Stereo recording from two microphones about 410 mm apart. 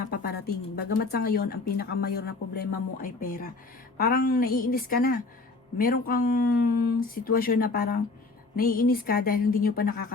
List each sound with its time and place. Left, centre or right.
0.1 s speech: left